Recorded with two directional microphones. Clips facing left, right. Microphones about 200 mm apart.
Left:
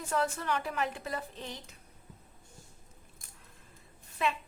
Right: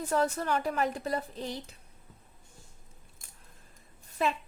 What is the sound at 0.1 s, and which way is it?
A woman's voice, 40° right (ahead or behind).